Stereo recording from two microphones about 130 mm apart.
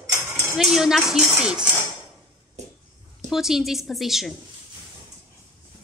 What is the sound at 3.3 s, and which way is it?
A woman's voice, 5° right (ahead or behind).